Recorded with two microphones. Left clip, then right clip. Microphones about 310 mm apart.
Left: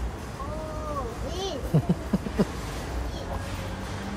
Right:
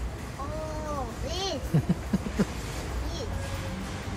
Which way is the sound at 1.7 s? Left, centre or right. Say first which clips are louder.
Left 3 dB; centre.